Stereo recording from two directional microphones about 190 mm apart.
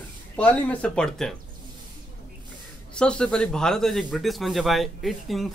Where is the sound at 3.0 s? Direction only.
5° left (ahead or behind).